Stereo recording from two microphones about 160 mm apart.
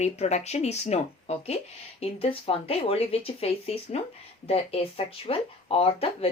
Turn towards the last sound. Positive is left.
turn(degrees=35)  # may be behind; listen again after turning